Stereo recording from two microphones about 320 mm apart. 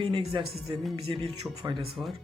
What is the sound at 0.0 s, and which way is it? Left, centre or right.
Speech, centre.